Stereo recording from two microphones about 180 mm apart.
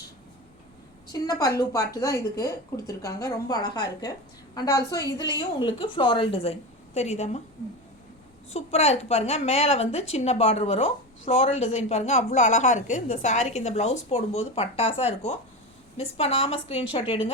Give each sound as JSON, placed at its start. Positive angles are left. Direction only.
{"t": 1.1, "sound": "a woman's voice", "side_deg": 20}
{"t": 8.4, "sound": "a woman's voice", "side_deg": 35}